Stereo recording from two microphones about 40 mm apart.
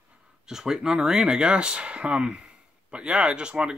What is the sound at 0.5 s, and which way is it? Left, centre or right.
Speech, centre.